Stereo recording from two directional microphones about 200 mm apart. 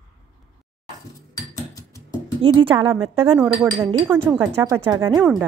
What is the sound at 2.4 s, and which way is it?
Speech, 25° right (ahead or behind).